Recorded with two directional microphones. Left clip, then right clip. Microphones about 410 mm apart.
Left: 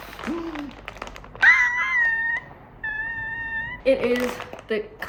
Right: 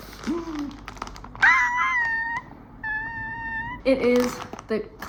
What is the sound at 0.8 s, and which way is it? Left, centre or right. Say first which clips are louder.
Cat: even; centre.